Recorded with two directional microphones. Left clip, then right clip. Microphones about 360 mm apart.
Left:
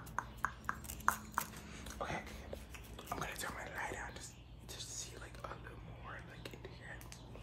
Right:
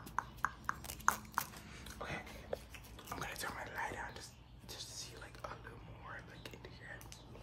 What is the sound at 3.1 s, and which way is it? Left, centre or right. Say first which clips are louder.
Whispering: left 1 dB; centre.